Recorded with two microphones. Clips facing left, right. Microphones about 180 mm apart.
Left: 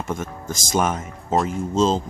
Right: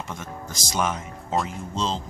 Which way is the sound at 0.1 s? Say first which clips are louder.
Left 7 dB; 50° left (ahead or behind).